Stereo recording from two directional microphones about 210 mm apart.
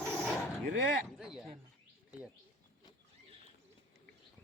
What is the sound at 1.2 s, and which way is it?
Speech, centre (ahead or behind).